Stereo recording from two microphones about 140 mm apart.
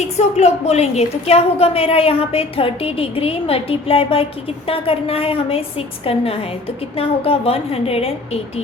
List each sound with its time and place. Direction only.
0.0 s a woman's voice: 50° left (ahead or behind)